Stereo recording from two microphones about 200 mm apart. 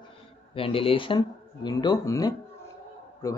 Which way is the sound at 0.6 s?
25° left (ahead or behind).